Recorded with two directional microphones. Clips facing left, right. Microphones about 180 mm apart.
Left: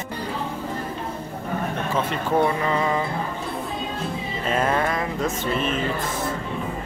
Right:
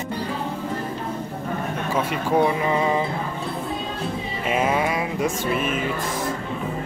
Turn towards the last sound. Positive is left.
turn(degrees=-10)  # may be behind; listen again after turning